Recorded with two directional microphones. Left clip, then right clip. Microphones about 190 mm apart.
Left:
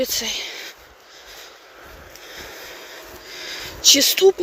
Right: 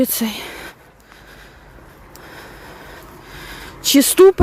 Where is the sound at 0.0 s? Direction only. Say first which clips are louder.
Right 2 dB; 45° right (ahead or behind).